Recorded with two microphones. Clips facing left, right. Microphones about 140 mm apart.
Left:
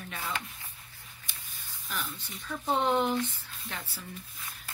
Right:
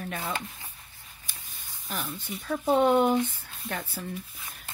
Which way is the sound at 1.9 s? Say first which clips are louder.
Right 4 dB; 45° right (ahead or behind).